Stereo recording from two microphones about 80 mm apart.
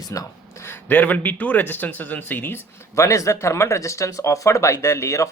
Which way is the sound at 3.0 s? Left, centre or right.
Left.